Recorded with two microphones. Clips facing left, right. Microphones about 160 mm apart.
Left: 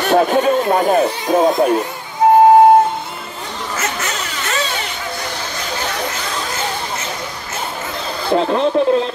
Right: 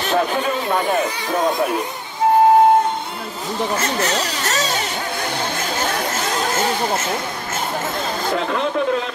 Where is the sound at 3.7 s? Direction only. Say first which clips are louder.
Right 1 dB; 35° right (ahead or behind).